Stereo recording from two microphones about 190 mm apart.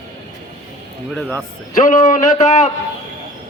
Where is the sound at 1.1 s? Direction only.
5° left (ahead or behind).